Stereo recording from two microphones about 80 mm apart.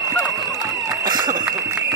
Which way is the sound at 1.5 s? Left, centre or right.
Right.